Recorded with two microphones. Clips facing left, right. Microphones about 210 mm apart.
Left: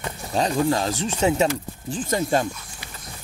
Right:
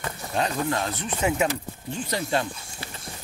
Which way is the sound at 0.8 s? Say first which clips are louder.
Left 6 dB; 90° left.